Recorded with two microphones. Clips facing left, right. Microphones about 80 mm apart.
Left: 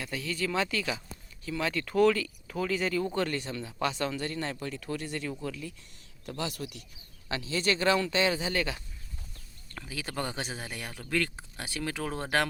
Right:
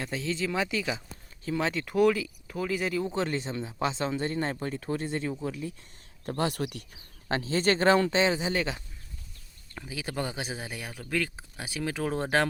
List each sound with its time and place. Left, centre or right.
0.0 s speech: right; by 3.1 s centre
3.2 s speech: right
6.2 s speech: right